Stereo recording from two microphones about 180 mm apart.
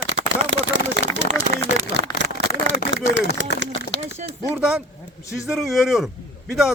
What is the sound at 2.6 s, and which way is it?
Speech, 80° right.